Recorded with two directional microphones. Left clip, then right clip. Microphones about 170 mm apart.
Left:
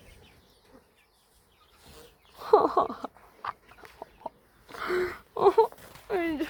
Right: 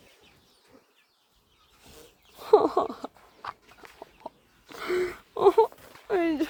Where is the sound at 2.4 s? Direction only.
20° right (ahead or behind).